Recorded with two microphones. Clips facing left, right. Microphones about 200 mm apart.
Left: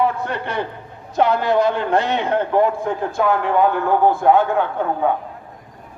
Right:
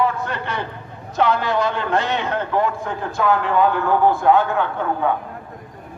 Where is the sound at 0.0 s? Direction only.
55° left (ahead or behind).